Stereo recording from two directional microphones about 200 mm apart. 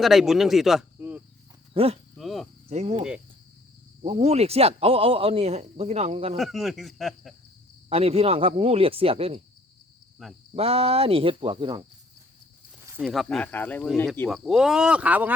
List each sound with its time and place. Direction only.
0.0 s speech: centre (ahead or behind)
1.7 s speech: 30° right (ahead or behind)
2.1 s cricket: centre (ahead or behind)
2.6 s cricket: 30° right (ahead or behind)
4.0 s speech: 30° right (ahead or behind)
6.3 s speech: centre (ahead or behind)
7.9 s speech: 30° right (ahead or behind)
10.5 s speech: 30° right (ahead or behind)
12.8 s snake: 10° right (ahead or behind)
13.1 s speech: 5° left (ahead or behind)
14.3 s speech: centre (ahead or behind)